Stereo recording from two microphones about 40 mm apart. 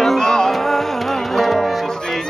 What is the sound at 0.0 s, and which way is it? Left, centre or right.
Music, centre.